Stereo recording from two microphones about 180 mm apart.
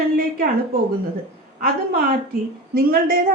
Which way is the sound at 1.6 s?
55° right (ahead or behind).